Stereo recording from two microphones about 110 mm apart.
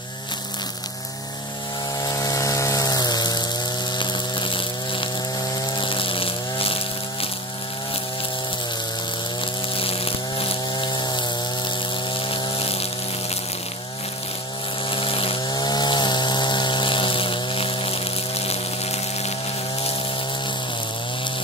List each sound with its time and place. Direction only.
2.0 s power tool: 30° left (ahead or behind)
4.0 s chainsaw: 45° left (ahead or behind)
9.8 s chainsaw: 60° left (ahead or behind)
10.7 s chainsaw: 45° left (ahead or behind)
12.3 s insect: 50° left (ahead or behind)
14.9 s chainsaw: 55° left (ahead or behind)
15.4 s chainsaw: 40° left (ahead or behind); by 19.3 s 70° left (ahead or behind)